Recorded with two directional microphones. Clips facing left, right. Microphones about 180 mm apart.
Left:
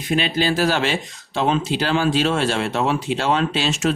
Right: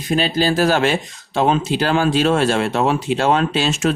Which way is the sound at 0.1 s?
40° right (ahead or behind).